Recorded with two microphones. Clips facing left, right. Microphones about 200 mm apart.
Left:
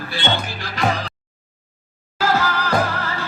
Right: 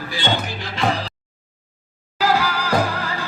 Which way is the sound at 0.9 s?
30° right (ahead or behind).